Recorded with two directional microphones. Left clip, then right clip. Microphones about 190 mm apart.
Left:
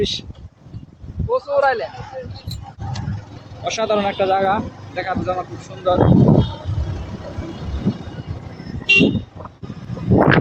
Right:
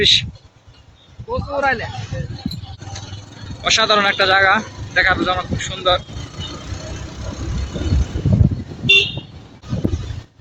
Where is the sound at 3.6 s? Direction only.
10° left (ahead or behind).